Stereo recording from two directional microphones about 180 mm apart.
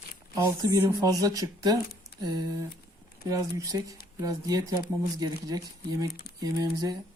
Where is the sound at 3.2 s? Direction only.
20° right (ahead or behind).